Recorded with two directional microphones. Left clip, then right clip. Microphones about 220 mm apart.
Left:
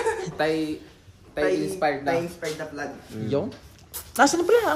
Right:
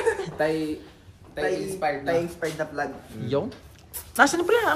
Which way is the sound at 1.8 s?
40° left (ahead or behind).